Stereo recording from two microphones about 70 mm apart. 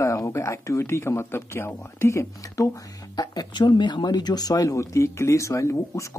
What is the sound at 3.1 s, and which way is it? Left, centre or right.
Speech, left.